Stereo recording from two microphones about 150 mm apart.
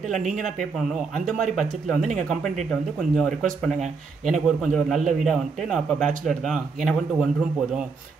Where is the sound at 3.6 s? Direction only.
Centre (ahead or behind).